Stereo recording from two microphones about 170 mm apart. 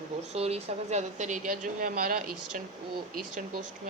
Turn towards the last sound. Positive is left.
turn(degrees=-50)  # may be behind; listen again after turning